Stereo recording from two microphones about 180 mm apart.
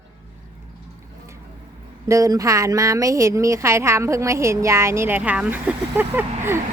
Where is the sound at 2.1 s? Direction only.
20° right (ahead or behind).